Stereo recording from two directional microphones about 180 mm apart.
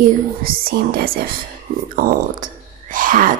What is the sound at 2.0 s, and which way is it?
Speech, 50° right (ahead or behind).